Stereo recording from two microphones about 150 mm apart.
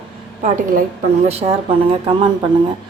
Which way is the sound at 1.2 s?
45° right (ahead or behind).